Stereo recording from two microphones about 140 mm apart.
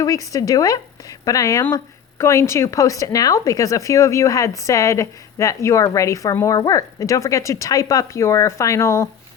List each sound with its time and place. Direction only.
0.0 s a woman's voice: 25° left (ahead or behind)